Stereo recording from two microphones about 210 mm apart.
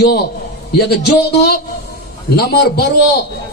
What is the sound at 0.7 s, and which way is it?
A man's voice, 50° left (ahead or behind).